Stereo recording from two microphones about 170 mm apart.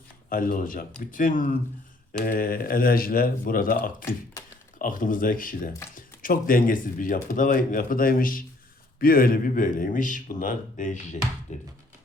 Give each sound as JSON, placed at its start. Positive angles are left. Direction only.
{"t": 0.3, "sound": "speech", "side_deg": 55}